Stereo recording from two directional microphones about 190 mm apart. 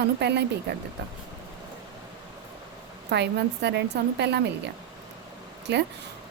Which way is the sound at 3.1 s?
60° right (ahead or behind).